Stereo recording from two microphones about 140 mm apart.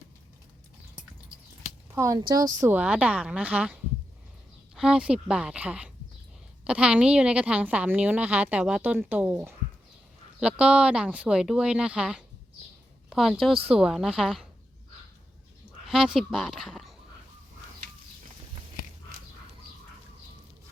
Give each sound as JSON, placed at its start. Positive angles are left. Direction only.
{"t": 2.0, "sound": "speech", "side_deg": -25}
{"t": 2.7, "sound": "a woman's voice", "side_deg": -10}
{"t": 4.7, "sound": "a woman's voice", "side_deg": -5}
{"t": 13.1, "sound": "a sound", "side_deg": 0}
{"t": 13.5, "sound": "speech", "side_deg": -40}
{"t": 13.7, "sound": "speech", "side_deg": -5}
{"t": 15.9, "sound": "speech", "side_deg": -5}